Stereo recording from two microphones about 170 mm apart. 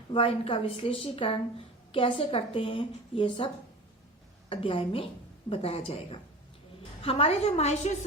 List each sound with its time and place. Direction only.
0.1 s a woman's voice: 30° left (ahead or behind)